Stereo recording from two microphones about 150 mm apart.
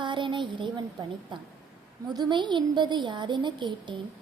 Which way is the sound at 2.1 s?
30° right (ahead or behind).